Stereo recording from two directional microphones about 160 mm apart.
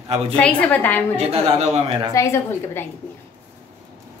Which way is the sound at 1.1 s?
40° right (ahead or behind).